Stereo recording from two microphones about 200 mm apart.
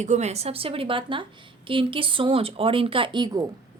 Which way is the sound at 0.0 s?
35° right (ahead or behind).